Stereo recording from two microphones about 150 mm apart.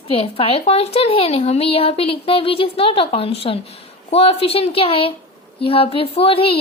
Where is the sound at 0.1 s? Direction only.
40° left (ahead or behind).